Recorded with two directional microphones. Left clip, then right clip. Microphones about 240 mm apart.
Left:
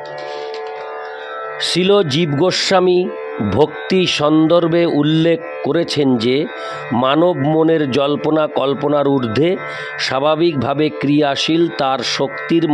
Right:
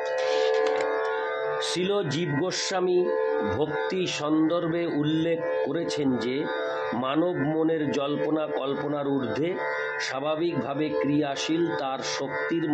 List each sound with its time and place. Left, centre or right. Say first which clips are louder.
1.6 s mantra: left 18 dB; left